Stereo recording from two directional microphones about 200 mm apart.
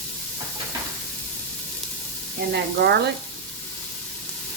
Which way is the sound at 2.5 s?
55° right (ahead or behind).